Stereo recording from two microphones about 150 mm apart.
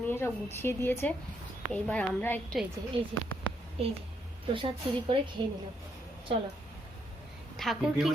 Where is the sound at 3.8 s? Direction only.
40° right (ahead or behind).